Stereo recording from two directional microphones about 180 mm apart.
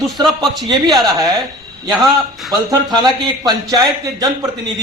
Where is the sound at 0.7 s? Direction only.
20° right (ahead or behind).